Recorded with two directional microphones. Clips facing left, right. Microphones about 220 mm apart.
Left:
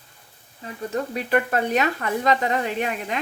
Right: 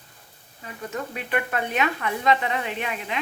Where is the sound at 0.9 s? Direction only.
40° left (ahead or behind).